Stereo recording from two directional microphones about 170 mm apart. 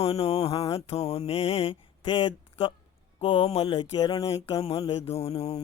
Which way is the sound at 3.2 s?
30° left (ahead or behind).